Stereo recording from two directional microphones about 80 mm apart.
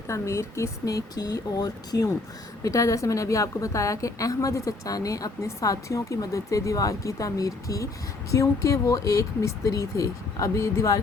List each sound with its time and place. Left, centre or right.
0.1 s a woman's voice: left
2.6 s a woman's voice: left